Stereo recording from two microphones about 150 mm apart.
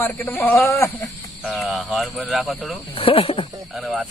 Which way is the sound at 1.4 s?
Centre (ahead or behind).